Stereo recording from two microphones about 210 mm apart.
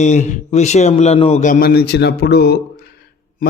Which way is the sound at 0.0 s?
35° left (ahead or behind).